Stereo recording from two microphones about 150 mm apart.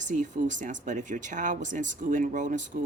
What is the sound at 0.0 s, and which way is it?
Speech, 55° right (ahead or behind).